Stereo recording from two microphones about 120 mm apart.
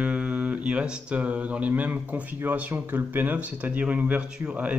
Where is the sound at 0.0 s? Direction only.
10° right (ahead or behind).